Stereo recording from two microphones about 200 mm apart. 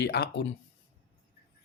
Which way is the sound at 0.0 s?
55° left (ahead or behind).